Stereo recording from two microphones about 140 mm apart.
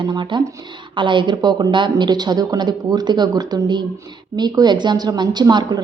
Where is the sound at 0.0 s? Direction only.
35° right (ahead or behind).